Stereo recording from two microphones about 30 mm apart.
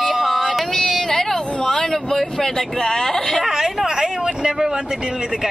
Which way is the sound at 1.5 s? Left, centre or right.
Left.